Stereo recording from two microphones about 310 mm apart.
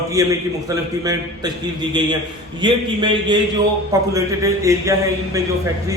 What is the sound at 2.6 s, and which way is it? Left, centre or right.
A man's voice, centre.